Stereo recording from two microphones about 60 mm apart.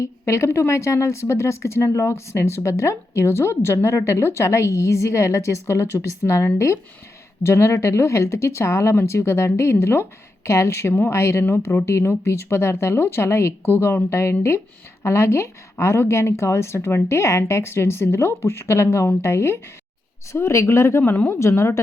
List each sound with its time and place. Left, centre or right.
0.0 s a woman's voice: left